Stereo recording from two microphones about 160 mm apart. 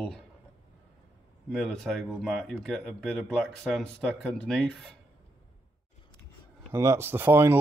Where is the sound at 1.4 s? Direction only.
Centre (ahead or behind).